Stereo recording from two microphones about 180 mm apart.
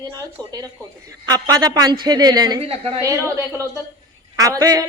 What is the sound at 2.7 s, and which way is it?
Speech, 35° right (ahead or behind).